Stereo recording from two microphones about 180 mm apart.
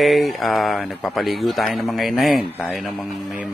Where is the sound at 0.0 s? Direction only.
Centre (ahead or behind).